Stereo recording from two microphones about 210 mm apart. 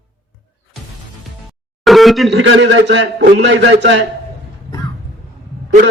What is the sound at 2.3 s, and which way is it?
A man's voice, 60° right (ahead or behind).